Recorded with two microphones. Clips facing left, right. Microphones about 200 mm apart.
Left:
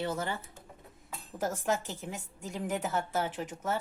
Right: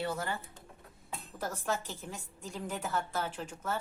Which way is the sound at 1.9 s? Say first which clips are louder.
Left 3 dB; 15° left (ahead or behind).